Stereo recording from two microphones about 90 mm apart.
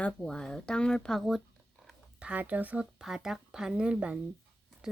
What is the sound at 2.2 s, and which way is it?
Speech, 15° right (ahead or behind).